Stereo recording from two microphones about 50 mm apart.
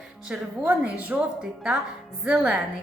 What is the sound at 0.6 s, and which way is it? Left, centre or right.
Speech, right.